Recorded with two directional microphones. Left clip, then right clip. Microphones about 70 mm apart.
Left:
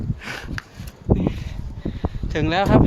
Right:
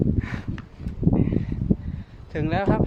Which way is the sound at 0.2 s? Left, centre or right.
Right.